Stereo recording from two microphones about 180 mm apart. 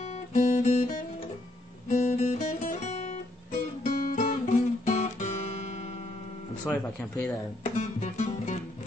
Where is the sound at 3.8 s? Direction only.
50° left (ahead or behind).